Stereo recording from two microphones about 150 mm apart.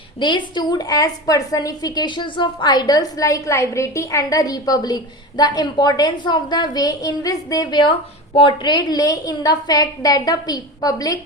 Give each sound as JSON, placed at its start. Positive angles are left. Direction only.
{"t": 0.2, "sound": "a woman's voice", "side_deg": 30}